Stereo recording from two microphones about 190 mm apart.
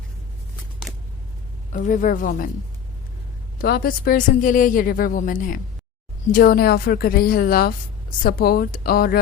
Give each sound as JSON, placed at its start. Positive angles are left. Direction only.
{"t": 1.7, "sound": "speech", "side_deg": 45}
{"t": 3.6, "sound": "speech", "side_deg": 50}